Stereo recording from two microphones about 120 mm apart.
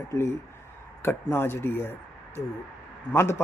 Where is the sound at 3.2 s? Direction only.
20° left (ahead or behind).